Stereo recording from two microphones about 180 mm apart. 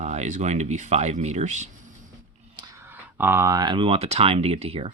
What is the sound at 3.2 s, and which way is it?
Speech, 15° right (ahead or behind).